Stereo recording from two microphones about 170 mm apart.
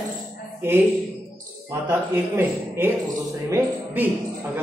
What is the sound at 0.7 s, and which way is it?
A man's voice, 15° right (ahead or behind).